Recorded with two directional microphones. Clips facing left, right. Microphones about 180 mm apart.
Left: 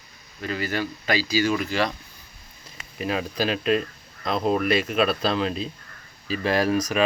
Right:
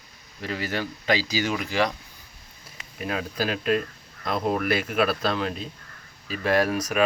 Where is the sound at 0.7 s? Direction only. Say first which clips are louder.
Right 2 dB; 15° right (ahead or behind).